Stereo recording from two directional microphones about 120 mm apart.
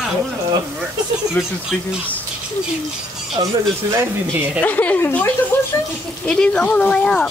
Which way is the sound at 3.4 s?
40° right (ahead or behind).